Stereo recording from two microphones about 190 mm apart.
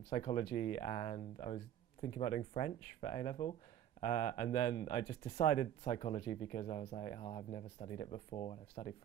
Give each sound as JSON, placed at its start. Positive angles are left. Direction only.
{"t": 0.1, "sound": "speech", "side_deg": 30}